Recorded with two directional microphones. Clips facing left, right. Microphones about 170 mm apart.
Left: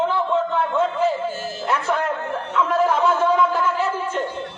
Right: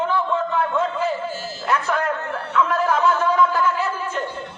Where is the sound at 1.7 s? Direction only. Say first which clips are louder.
Even; 25° left (ahead or behind).